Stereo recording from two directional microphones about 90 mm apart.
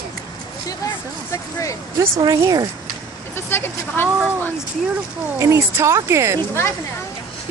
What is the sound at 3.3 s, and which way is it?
Speech, 25° left (ahead or behind).